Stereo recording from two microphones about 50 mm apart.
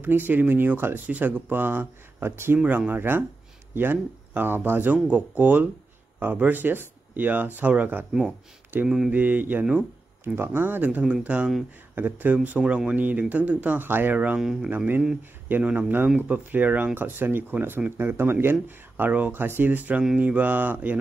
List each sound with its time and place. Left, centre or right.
0.0 s speech: right
1.0 s speech: right
2.9 s speech: right
8.8 s mantra: centre
9.1 s speech: right
10.2 s speech: right
11.1 s speech: right
11.9 s speech: right
12.4 s speech: right
13.8 s speech: right
14.1 s speech: right
14.4 s mantra: centre
15.5 s speech: right
19.0 s speech: right